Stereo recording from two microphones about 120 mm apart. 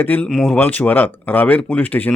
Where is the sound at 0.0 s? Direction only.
15° left (ahead or behind).